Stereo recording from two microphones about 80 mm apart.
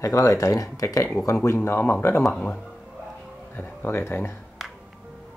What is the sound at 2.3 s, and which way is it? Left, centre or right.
Speech, centre.